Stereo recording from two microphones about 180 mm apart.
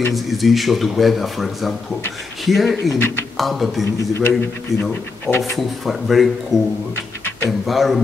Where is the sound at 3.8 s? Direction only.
15° left (ahead or behind).